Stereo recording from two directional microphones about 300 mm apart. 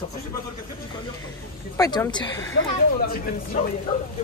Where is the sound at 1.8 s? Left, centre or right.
Centre.